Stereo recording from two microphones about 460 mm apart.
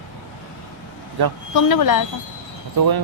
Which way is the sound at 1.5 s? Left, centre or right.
Left.